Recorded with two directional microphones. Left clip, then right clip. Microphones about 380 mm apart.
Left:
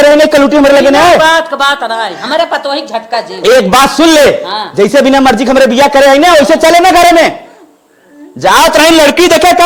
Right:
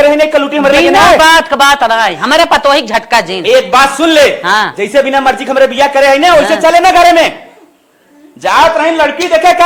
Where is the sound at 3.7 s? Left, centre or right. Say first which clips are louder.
Left 2 dB; left.